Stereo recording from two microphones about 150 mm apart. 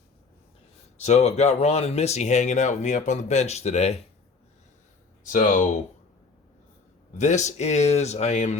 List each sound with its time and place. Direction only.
1.0 s speech: 50° left (ahead or behind)
5.2 s speech: 60° left (ahead or behind)
7.2 s speech: 50° left (ahead or behind)